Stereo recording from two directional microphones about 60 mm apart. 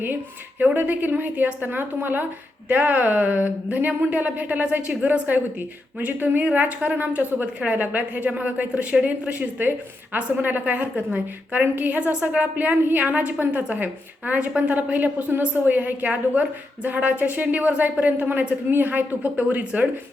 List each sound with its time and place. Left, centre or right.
0.6 s a woman's voice: right
11.6 s a woman's voice: right